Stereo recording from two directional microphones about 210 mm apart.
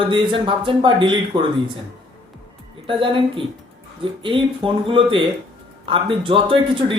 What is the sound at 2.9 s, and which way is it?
A man's voice, 25° right (ahead or behind).